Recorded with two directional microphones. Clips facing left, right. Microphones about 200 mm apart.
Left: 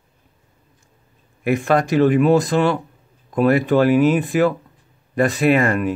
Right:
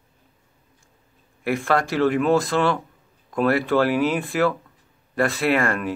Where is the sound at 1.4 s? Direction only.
20° left (ahead or behind).